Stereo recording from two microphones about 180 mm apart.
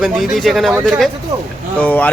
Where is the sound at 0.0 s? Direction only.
Centre (ahead or behind).